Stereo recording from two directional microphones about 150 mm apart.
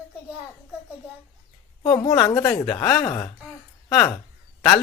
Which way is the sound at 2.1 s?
20° left (ahead or behind).